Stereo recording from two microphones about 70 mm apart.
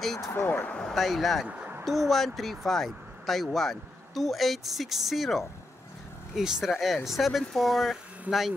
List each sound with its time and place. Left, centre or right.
0.2 s speech: left
0.7 s speech: centre
1.6 s a sound: right
1.9 s speech: centre